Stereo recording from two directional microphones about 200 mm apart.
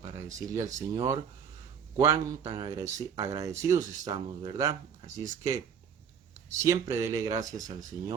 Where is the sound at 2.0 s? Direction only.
20° right (ahead or behind).